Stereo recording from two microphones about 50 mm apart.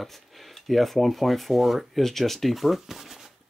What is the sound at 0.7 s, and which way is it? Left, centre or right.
Speech, centre.